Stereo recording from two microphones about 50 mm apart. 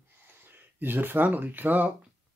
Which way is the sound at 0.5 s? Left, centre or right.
Right.